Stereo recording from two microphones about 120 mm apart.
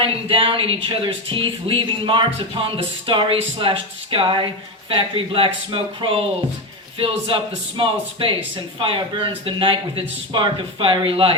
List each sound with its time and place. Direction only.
0.0 s speech: 50° right (ahead or behind)